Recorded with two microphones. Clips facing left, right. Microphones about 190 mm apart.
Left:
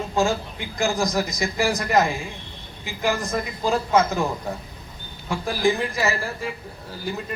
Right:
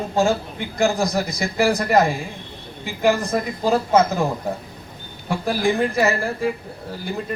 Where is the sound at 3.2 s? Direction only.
40° right (ahead or behind).